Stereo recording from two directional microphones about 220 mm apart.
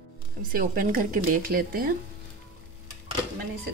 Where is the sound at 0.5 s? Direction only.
40° right (ahead or behind).